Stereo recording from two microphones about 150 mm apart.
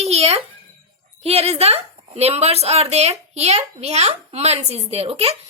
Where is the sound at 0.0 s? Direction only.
45° right (ahead or behind).